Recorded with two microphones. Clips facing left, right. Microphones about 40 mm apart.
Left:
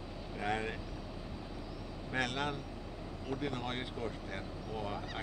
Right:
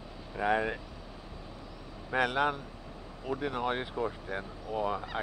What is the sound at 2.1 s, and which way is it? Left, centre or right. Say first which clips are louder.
Speech: right 7 dB; centre.